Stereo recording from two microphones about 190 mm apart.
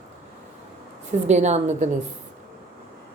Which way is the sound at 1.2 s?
35° right (ahead or behind).